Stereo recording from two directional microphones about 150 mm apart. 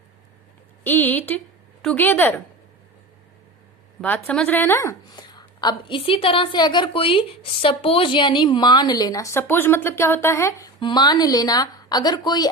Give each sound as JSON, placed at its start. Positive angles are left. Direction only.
{"t": 0.9, "sound": "a woman's voice", "side_deg": 10}
{"t": 4.0, "sound": "a woman's voice", "side_deg": 10}
{"t": 10.8, "sound": "a woman's voice", "side_deg": 30}